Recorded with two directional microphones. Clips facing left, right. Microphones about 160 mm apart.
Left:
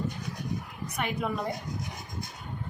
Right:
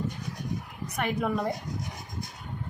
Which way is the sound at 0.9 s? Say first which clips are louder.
Right 3 dB; 50° right (ahead or behind).